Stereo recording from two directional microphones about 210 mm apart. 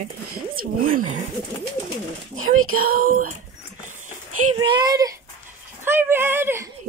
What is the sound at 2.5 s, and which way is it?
Speech, 90° right.